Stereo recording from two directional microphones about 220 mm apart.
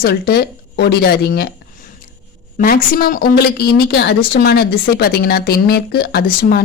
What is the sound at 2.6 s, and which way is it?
A woman's voice, 40° left (ahead or behind).